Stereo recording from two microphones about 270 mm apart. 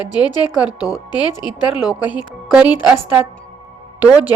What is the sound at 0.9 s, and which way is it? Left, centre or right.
Speech, centre.